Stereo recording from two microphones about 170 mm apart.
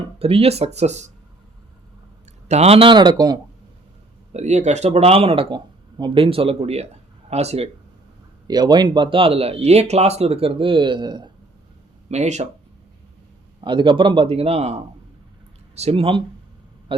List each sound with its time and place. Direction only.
0.2 s speech: 35° right (ahead or behind)
2.5 s speech: 40° right (ahead or behind)
4.3 s speech: 40° right (ahead or behind)
8.4 s speech: 25° right (ahead or behind)
12.1 s speech: 40° right (ahead or behind)
13.6 s speech: 30° right (ahead or behind)